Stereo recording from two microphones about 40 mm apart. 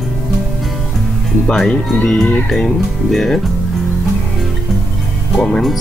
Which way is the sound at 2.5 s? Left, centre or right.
Centre.